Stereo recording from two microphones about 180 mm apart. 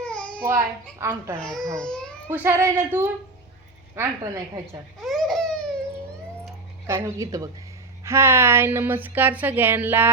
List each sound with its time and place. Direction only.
0.0 s babbling: 5° left (ahead or behind)
0.4 s a woman's voice: 15° right (ahead or behind)
1.4 s speech: 5° left (ahead or behind)
2.3 s a woman's voice: 15° right (ahead or behind)
4.9 s a sound: centre (ahead or behind)
6.8 s a woman's voice: 15° right (ahead or behind)